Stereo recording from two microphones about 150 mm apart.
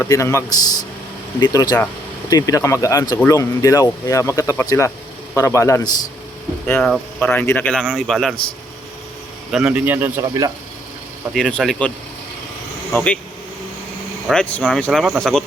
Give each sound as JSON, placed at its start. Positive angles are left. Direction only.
{"t": 0.0, "sound": "speech", "side_deg": 20}
{"t": 6.8, "sound": "speech", "side_deg": 5}
{"t": 9.5, "sound": "speech", "side_deg": -5}
{"t": 11.3, "sound": "speech", "side_deg": 5}
{"t": 12.9, "sound": "speech", "side_deg": 10}
{"t": 14.3, "sound": "speech", "side_deg": 5}